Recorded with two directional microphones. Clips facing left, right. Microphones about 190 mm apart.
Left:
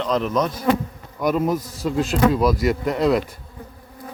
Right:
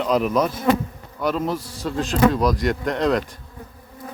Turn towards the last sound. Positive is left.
turn(degrees=5)  # may be behind; listen again after turning